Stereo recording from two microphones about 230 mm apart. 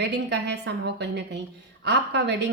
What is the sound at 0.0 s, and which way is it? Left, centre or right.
Speech, right.